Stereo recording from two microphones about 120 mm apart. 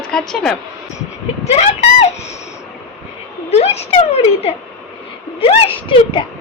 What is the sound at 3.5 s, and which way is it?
A woman's voice, 65° left (ahead or behind).